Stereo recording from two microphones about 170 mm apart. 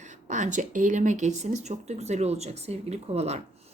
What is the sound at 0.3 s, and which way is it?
Speech, 45° right (ahead or behind).